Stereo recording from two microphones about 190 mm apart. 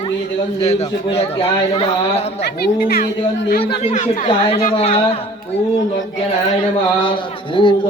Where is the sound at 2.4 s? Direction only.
55° left (ahead or behind).